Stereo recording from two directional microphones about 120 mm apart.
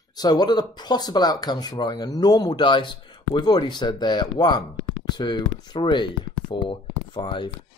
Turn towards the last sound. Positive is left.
turn(degrees=40)  # may be behind; listen again after turning